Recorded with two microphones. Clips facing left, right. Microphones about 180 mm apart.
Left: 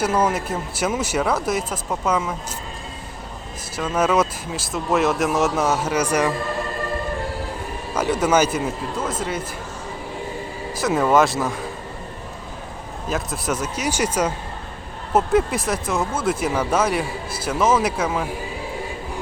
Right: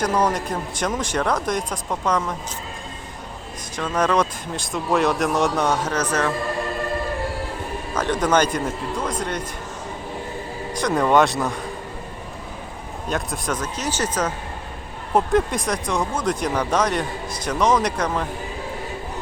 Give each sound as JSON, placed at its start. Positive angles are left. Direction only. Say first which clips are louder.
{"t": 0.0, "sound": "speech", "louder": "left 1 dB", "side_deg": 5}
{"t": 3.8, "sound": "speech", "louder": "left 1 dB", "side_deg": 5}
{"t": 7.9, "sound": "speech", "louder": "left 1 dB", "side_deg": 10}
{"t": 10.8, "sound": "speech", "louder": "even", "side_deg": 5}
{"t": 13.1, "sound": "speech", "louder": "left 1 dB", "side_deg": 5}